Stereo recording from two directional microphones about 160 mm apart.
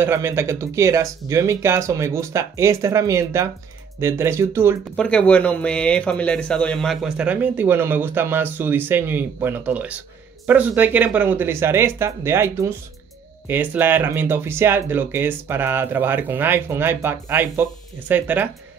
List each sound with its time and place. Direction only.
0.0 s speech: 15° right (ahead or behind)
4.9 s speech: 5° left (ahead or behind); by 18.5 s 10° right (ahead or behind)